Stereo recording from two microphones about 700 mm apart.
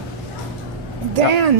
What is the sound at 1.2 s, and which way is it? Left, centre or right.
Speech, right.